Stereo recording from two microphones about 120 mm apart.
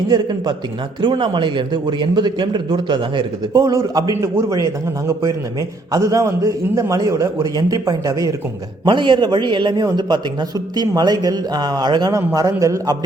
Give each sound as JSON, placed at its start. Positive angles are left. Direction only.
{"t": 0.1, "sound": "a man's voice", "side_deg": -35}
{"t": 3.6, "sound": "a man's voice", "side_deg": -30}
{"t": 8.8, "sound": "a man's voice", "side_deg": -40}